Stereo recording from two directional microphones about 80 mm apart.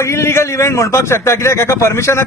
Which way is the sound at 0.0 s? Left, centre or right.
Left.